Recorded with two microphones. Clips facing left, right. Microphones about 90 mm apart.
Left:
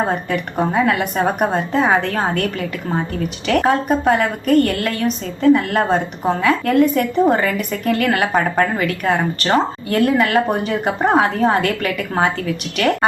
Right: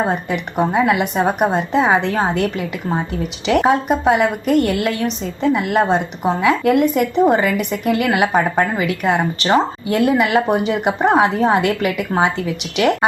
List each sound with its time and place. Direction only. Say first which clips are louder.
0.0 s speech: even; 10° right (ahead or behind)
11.0 s a woman's voice: right 1 dB; 5° right (ahead or behind)